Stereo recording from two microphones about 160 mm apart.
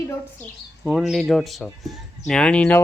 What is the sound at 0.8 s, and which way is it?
A man's voice, centre (ahead or behind).